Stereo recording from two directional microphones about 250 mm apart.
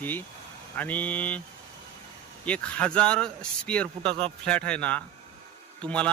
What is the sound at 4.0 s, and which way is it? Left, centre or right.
Speech, right.